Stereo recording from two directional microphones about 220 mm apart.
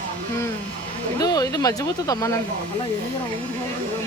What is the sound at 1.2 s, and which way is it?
Speech, 15° left (ahead or behind).